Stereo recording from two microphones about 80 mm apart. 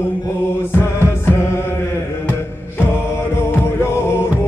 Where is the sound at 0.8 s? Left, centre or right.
Left.